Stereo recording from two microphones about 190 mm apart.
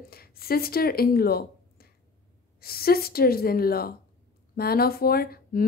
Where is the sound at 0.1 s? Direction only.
55° left (ahead or behind).